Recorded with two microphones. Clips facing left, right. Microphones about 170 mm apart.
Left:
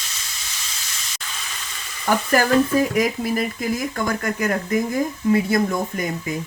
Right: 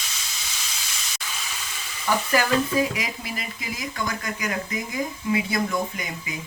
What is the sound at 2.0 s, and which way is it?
Speech, 50° left (ahead or behind).